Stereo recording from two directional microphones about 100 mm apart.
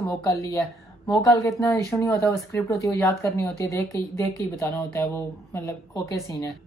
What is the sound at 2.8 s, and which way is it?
Speech, 30° left (ahead or behind).